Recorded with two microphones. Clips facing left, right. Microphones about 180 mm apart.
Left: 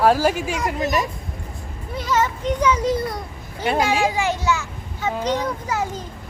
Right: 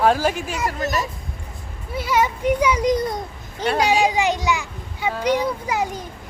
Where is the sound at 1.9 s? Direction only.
10° right (ahead or behind).